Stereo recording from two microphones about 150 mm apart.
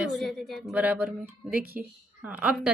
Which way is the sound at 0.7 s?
10° right (ahead or behind).